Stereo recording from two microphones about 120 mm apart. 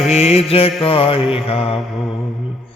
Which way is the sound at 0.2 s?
60° left (ahead or behind).